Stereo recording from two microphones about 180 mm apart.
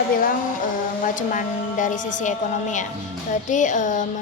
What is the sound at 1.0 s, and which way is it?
A woman's voice, 45° left (ahead or behind).